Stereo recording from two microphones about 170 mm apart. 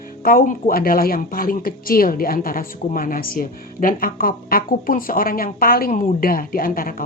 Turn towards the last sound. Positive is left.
turn(degrees=55)  # may be behind; listen again after turning